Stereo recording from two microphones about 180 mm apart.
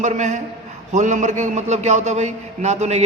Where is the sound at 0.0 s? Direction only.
40° right (ahead or behind).